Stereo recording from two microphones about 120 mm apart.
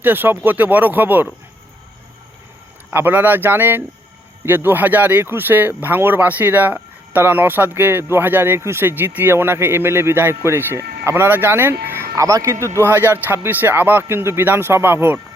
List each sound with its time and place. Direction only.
0.0 s speech: 15° right (ahead or behind)
2.9 s speech: 15° right (ahead or behind)